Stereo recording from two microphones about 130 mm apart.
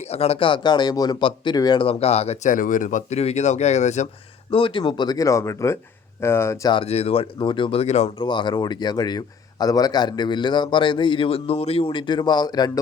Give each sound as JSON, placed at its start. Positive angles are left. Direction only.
{"t": 0.1, "sound": "speech", "side_deg": 50}
{"t": 2.5, "sound": "speech", "side_deg": 90}
{"t": 4.5, "sound": "speech", "side_deg": 40}
{"t": 6.8, "sound": "speech", "side_deg": 55}
{"t": 7.3, "sound": "speech", "side_deg": 40}
{"t": 8.2, "sound": "speech", "side_deg": 40}